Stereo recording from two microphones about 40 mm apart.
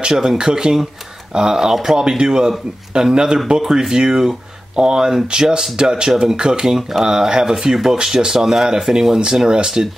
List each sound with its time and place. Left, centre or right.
0.1 s speech: centre
0.4 s speech: right